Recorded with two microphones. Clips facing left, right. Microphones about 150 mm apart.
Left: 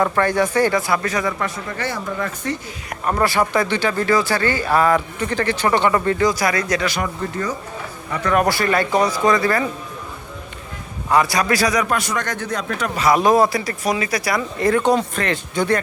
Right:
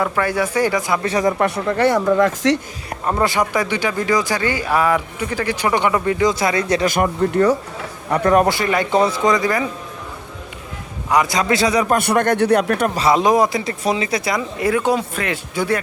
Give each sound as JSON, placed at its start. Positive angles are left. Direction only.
{"t": 0.0, "sound": "speech", "side_deg": -10}
{"t": 1.0, "sound": "speech", "side_deg": -35}
{"t": 1.4, "sound": "speech", "side_deg": -65}
{"t": 1.8, "sound": "speech", "side_deg": -75}
{"t": 2.9, "sound": "speech", "side_deg": -20}
{"t": 6.8, "sound": "speech", "side_deg": -50}
{"t": 8.2, "sound": "speech", "side_deg": -35}
{"t": 8.4, "sound": "speech", "side_deg": -20}
{"t": 11.1, "sound": "speech", "side_deg": -20}
{"t": 11.9, "sound": "speech", "side_deg": -55}
{"t": 13.0, "sound": "speech", "side_deg": -25}
{"t": 14.6, "sound": "speech", "side_deg": -10}